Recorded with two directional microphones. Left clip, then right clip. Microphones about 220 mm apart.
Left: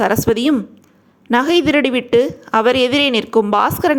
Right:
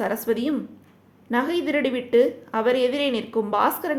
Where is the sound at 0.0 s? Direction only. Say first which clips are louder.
Left 9 dB; 35° left (ahead or behind).